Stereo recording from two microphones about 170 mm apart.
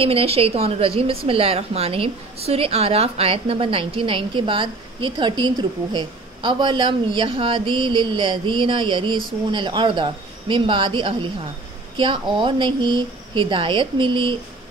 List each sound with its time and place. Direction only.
0.0 s a woman's voice: 35° right (ahead or behind)